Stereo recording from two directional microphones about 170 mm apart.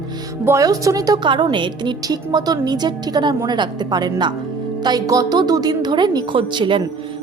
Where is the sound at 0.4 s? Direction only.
20° right (ahead or behind).